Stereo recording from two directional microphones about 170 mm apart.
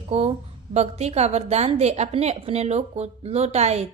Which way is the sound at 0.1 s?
35° right (ahead or behind).